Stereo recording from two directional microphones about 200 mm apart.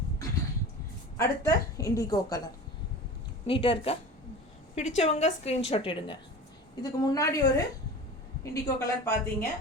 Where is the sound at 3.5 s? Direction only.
25° left (ahead or behind).